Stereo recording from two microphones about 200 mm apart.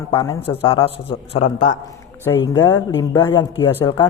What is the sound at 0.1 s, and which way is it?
Speech, 20° left (ahead or behind).